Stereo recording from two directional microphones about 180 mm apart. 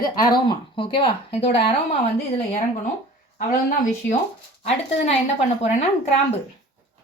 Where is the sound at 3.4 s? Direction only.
45° left (ahead or behind).